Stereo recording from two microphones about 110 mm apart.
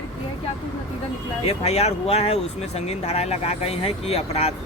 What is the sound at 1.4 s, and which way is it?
Speech, 70° left (ahead or behind).